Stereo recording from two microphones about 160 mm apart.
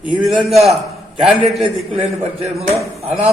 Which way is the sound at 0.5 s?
Centre (ahead or behind).